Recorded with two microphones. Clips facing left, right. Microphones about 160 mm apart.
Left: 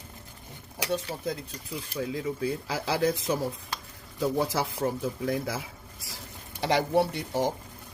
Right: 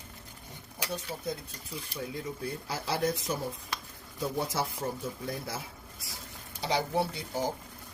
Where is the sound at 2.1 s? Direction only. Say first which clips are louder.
Left 7 dB; 90° left.